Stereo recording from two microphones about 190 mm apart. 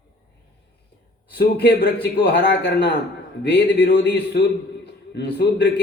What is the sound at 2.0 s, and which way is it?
A man's voice, 60° left (ahead or behind).